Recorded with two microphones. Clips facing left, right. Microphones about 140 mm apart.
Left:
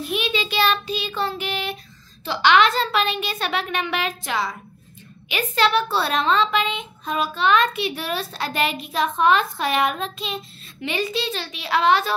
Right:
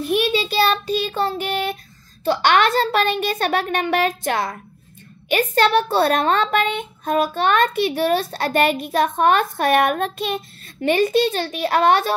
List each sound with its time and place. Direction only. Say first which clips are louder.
0.1 s a child's voice: right 6 dB; 40° right (ahead or behind)